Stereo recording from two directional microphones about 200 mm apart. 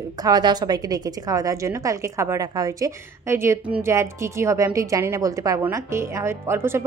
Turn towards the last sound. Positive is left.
turn(degrees=-10)  # may be behind; listen again after turning